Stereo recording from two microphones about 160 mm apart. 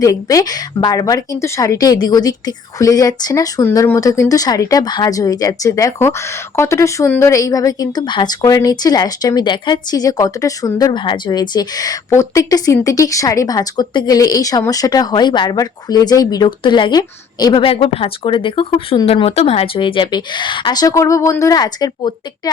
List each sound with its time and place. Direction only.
0.0 s speech: 20° left (ahead or behind)